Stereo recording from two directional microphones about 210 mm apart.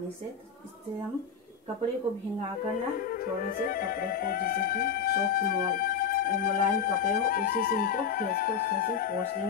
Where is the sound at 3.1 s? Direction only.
45° left (ahead or behind).